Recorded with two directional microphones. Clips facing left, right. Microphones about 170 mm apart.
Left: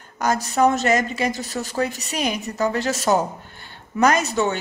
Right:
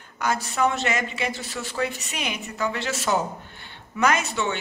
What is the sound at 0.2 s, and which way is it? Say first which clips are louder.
Speech: left 5 dB; 40° left (ahead or behind).